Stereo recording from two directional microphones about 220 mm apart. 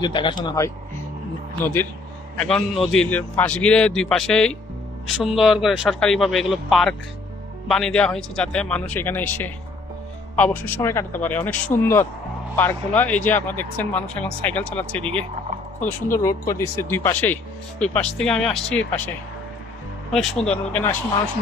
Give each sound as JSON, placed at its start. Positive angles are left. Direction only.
{"t": 0.0, "sound": "speech", "side_deg": 20}
{"t": 1.6, "sound": "speech", "side_deg": 10}
{"t": 20.1, "sound": "speech", "side_deg": 0}